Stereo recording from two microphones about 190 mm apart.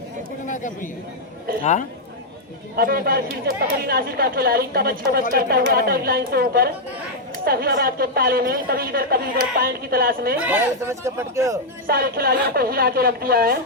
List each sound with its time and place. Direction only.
0.4 s a man's voice: 45° left (ahead or behind)
2.7 s a woman's voice: 55° right (ahead or behind)
10.3 s speech: 5° right (ahead or behind)
11.9 s a woman's voice: 50° right (ahead or behind)